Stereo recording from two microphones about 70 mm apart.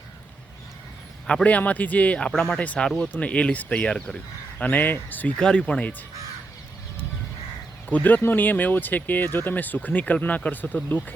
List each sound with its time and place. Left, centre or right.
1.3 s speech: centre
4.5 s speech: left
5.4 s speech: centre
7.9 s speech: left